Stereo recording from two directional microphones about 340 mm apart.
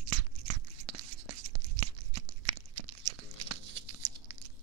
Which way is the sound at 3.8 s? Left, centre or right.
Right.